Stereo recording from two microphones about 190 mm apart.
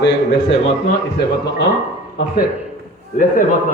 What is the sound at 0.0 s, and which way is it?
Speech, 65° left (ahead or behind).